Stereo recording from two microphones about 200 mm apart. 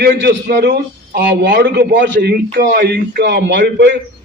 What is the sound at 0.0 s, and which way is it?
A man's voice, 50° right (ahead or behind).